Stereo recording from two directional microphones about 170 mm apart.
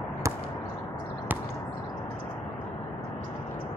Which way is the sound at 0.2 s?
15° right (ahead or behind).